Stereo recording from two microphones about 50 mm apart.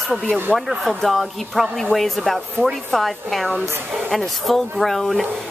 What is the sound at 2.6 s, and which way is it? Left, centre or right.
Speech, right.